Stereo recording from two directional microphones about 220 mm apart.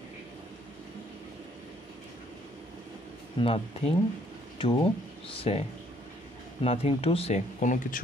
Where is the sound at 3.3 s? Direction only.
25° left (ahead or behind).